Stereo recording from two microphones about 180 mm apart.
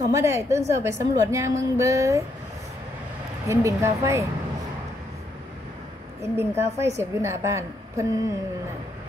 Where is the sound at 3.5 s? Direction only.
15° right (ahead or behind).